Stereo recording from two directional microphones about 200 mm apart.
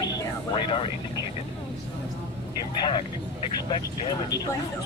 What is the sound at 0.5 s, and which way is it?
Speech, 25° left (ahead or behind).